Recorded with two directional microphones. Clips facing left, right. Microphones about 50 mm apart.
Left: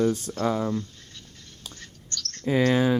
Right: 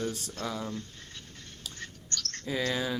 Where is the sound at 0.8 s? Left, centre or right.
Right.